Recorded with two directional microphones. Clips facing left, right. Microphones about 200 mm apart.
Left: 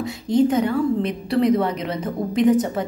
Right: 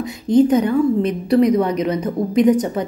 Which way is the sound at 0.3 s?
20° right (ahead or behind).